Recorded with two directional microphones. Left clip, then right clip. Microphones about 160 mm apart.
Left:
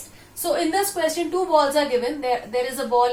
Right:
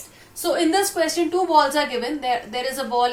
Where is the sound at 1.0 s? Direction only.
40° right (ahead or behind).